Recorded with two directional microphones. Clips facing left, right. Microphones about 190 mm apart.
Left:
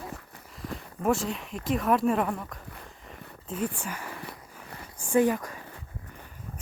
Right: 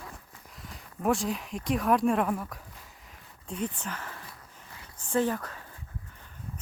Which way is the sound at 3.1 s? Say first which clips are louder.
Left 9 dB; 65° left (ahead or behind).